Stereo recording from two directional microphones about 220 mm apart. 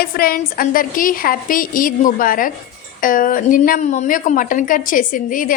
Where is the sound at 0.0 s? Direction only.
40° left (ahead or behind).